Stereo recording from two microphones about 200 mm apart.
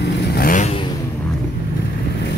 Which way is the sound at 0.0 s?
50° left (ahead or behind).